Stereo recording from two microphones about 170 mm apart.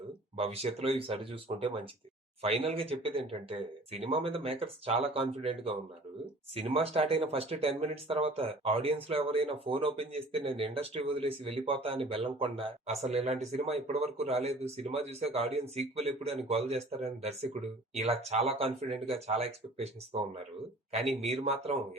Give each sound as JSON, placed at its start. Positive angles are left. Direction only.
{"t": 0.3, "sound": "speech", "side_deg": -35}
{"t": 21.0, "sound": "speech", "side_deg": 0}
{"t": 21.2, "sound": "speech", "side_deg": -40}